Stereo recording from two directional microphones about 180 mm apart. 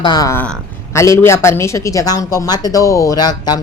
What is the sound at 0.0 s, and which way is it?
A woman's voice, 20° left (ahead or behind).